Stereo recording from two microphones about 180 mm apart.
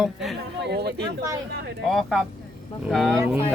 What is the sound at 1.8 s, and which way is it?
Speech, centre (ahead or behind).